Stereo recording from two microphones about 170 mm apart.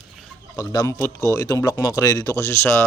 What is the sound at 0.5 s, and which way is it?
Speech, 20° left (ahead or behind).